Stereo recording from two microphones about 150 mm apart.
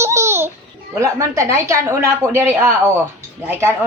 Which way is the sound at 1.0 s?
20° right (ahead or behind).